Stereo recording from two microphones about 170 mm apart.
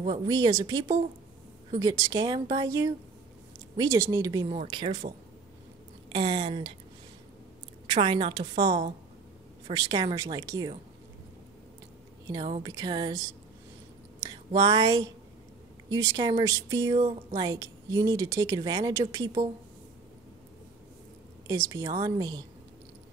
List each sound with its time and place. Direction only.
0.3 s a woman's voice: 20° right (ahead or behind)
7.8 s a woman's voice: 30° right (ahead or behind)
12.3 s a woman's voice: 25° right (ahead or behind)
14.5 s a woman's voice: 25° right (ahead or behind)
21.5 s a woman's voice: 20° right (ahead or behind)